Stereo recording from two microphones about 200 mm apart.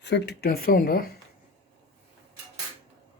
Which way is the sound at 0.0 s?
55° left (ahead or behind).